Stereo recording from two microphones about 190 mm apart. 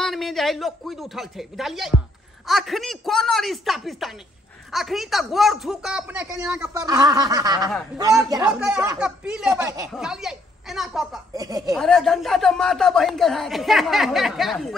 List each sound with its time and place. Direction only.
0.0 s a woman's voice: centre (ahead or behind); by 8.5 s 20° right (ahead or behind)
8.5 s speech: 5° right (ahead or behind)
11.3 s a woman's voice: 20° right (ahead or behind)
11.7 s speech: centre (ahead or behind)